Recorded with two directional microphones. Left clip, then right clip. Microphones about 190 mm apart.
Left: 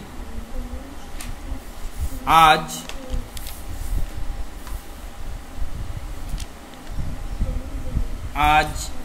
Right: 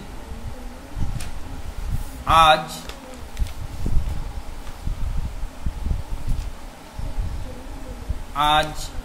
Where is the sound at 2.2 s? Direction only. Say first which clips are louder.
Left 1 dB; 25° left (ahead or behind).